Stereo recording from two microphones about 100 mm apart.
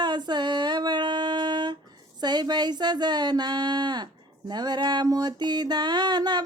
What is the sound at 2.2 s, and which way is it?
Speech, 45° right (ahead or behind).